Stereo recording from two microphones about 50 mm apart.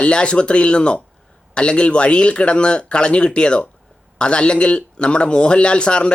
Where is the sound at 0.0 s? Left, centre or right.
Left.